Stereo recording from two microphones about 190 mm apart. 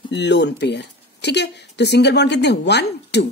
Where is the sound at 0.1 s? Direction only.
65° left (ahead or behind).